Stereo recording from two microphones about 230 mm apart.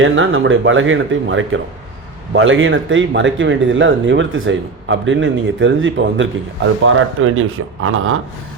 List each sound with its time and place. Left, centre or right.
0.0 s speech: right